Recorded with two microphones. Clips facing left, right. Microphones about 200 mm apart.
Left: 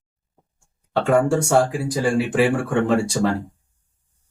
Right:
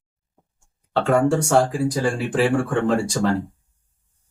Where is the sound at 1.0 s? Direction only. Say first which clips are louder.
Even; centre (ahead or behind).